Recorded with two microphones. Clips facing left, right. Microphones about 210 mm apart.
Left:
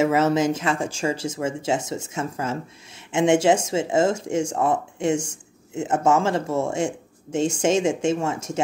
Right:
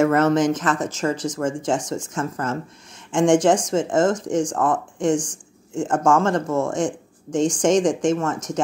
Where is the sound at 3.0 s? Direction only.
5° left (ahead or behind).